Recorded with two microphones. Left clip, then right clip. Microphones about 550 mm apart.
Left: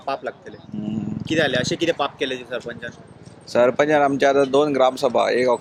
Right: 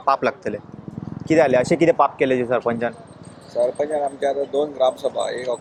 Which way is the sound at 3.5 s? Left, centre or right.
Left.